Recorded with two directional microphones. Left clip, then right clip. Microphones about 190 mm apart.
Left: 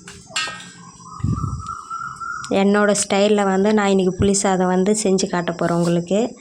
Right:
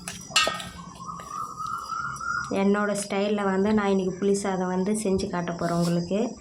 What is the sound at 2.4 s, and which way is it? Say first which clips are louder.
Speech: left 9 dB; 40° left (ahead or behind).